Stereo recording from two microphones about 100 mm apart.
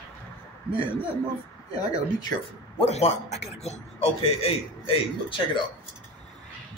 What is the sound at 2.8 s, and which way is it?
A man's voice, 90° left.